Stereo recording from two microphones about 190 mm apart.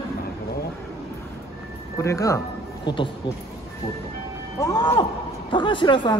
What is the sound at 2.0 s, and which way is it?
A man's voice, 15° left (ahead or behind).